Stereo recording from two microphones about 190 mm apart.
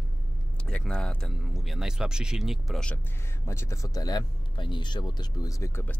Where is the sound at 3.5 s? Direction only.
15° left (ahead or behind).